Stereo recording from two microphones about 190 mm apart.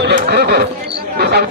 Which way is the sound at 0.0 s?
60° right (ahead or behind).